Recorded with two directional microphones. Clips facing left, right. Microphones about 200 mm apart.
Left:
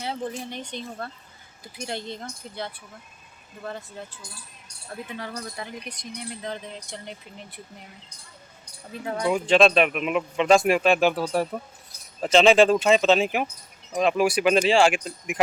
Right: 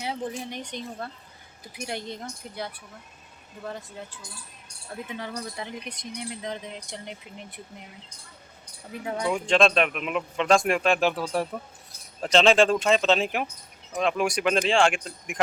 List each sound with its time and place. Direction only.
0.5 s speech: 15° right (ahead or behind)
5.0 s speech: 15° right (ahead or behind)
8.9 s speech: 10° right (ahead or behind)
9.2 s speech: 5° left (ahead or behind)